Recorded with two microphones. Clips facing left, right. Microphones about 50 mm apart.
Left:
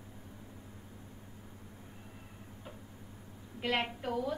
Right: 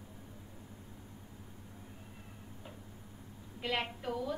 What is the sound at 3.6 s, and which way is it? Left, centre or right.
Speech, centre.